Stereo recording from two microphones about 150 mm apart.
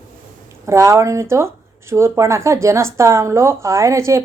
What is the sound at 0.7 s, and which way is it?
Speech, 20° right (ahead or behind).